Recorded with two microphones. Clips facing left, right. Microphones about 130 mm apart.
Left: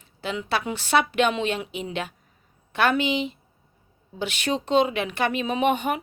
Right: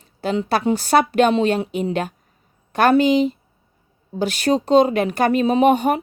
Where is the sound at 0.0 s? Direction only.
40° right (ahead or behind).